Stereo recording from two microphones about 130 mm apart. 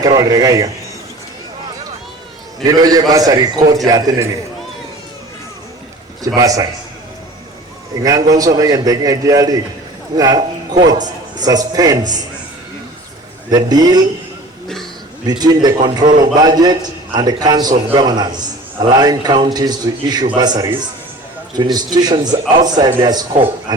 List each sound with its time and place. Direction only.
0.0 s a man's voice: 30° right (ahead or behind)
2.6 s a man's voice: 30° right (ahead or behind)
6.2 s a man's voice: 30° right (ahead or behind)
8.0 s a man's voice: 30° right (ahead or behind)
13.5 s a man's voice: 30° right (ahead or behind)
15.3 s a man's voice: 30° right (ahead or behind)